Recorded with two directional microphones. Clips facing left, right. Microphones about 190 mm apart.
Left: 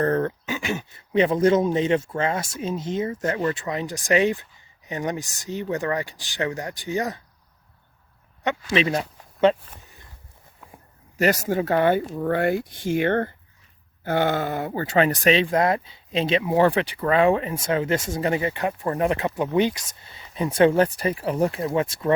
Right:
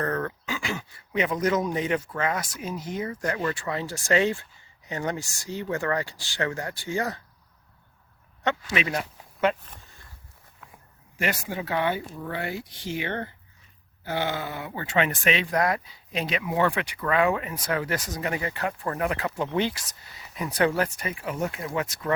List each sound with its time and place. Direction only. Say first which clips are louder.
0.0 s speech: left 6 dB; 30° left (ahead or behind)
8.7 s speech: left 6 dB; 30° left (ahead or behind)
11.2 s speech: left 8 dB; 40° left (ahead or behind); by 22.1 s 25° left (ahead or behind)